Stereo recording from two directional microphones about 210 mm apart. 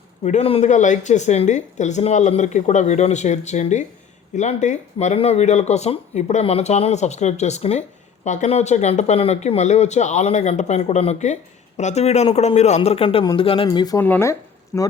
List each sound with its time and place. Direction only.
0.3 s a man's voice: 30° left (ahead or behind); by 14.9 s 10° left (ahead or behind)